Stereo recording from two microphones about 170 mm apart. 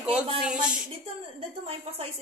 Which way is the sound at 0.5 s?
5° right (ahead or behind).